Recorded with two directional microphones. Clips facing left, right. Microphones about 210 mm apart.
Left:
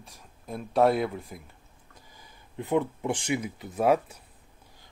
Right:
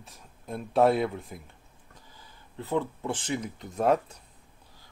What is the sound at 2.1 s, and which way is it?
Speech, 15° left (ahead or behind).